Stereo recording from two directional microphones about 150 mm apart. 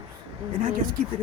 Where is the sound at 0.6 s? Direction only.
70° right (ahead or behind).